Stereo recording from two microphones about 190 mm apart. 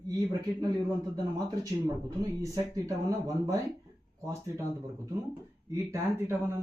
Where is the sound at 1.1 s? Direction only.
20° right (ahead or behind).